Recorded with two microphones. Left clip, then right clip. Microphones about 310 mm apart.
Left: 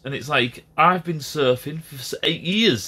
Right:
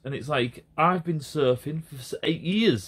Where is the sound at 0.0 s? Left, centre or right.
Centre.